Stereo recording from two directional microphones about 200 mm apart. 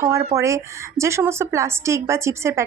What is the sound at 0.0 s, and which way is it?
A woman's voice, 15° right (ahead or behind).